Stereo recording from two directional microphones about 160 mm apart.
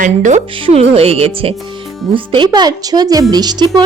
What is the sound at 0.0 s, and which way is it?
Speech, 50° right (ahead or behind).